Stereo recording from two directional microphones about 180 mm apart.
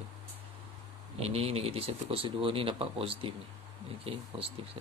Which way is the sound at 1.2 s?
35° right (ahead or behind).